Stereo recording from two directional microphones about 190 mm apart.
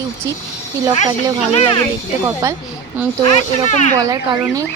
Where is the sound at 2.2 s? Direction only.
15° right (ahead or behind).